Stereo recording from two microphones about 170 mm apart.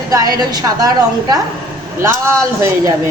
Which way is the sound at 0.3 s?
25° right (ahead or behind).